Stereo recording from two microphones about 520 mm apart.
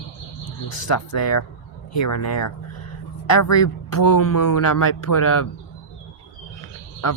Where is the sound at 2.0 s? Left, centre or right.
Left.